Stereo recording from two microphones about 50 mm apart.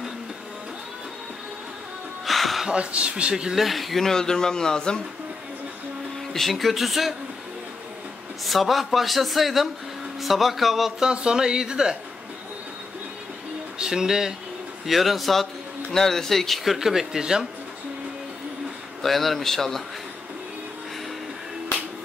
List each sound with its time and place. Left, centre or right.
2.2 s music: centre
2.7 s a man's voice: right
3.5 s speech: centre
6.3 s speech: centre
8.5 s speech: centre
11.0 s speech: centre
13.7 s speech: centre
16.7 s speech: centre
19.0 s speech: centre